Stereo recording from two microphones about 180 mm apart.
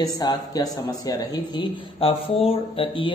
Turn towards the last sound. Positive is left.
turn(degrees=30)  # may be behind; listen again after turning